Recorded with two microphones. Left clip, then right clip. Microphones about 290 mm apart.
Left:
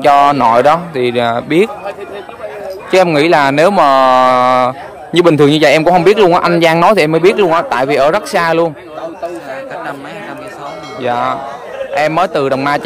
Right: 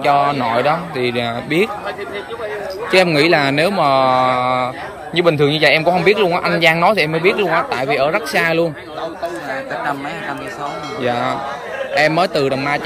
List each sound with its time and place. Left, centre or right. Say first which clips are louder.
0.5 s speech: left 7 dB; centre
2.9 s speech: left 4 dB; centre
3.7 s speech: left 4 dB; left
4.3 s a man's voice: left 7 dB; centre
11.0 s speech: left 4 dB; centre